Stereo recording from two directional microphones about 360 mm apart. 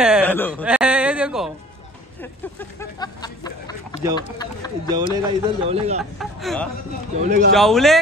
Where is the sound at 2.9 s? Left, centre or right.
Centre.